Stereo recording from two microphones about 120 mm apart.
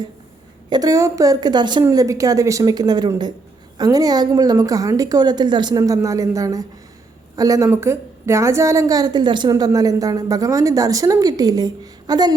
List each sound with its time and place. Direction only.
0.7 s a woman's voice: 30° right (ahead or behind)